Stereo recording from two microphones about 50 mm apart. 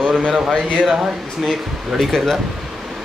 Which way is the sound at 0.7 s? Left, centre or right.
Right.